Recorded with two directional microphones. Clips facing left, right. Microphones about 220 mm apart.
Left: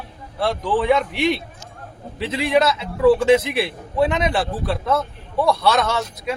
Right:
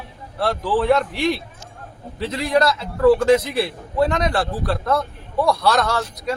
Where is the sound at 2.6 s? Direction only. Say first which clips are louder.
Even; 5° left (ahead or behind).